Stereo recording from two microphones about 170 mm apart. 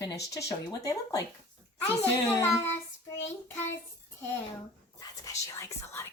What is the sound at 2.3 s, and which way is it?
Speech, 15° left (ahead or behind).